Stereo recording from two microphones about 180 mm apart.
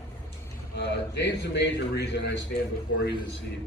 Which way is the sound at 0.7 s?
70° left (ahead or behind).